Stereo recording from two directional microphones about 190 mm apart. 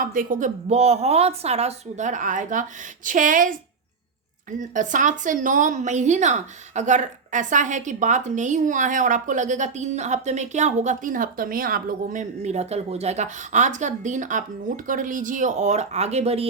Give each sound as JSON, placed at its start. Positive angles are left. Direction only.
{"t": 0.0, "sound": "a woman's voice", "side_deg": -45}